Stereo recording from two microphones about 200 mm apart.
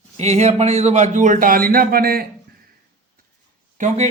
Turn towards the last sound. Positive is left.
turn(degrees=-35)  # may be behind; listen again after turning